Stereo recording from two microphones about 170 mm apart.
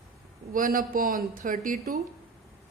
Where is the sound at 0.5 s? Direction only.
55° right (ahead or behind).